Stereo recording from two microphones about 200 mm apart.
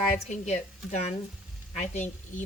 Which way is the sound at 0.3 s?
35° left (ahead or behind).